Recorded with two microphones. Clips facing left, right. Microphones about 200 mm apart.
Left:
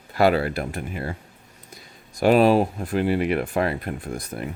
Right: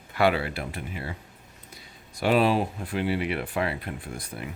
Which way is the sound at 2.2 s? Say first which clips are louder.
Left 6 dB; 45° left (ahead or behind).